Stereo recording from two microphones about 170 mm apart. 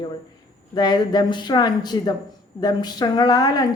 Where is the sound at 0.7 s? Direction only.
25° left (ahead or behind).